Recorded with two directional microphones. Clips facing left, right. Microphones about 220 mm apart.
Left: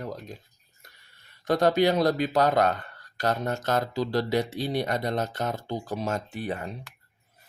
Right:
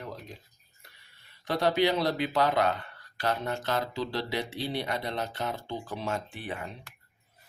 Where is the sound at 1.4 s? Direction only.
45° left (ahead or behind).